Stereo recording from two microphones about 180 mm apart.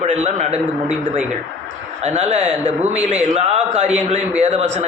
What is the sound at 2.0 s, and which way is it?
A man's voice, 40° right (ahead or behind).